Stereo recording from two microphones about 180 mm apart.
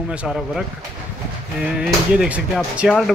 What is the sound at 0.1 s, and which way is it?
Speech, 5° right (ahead or behind).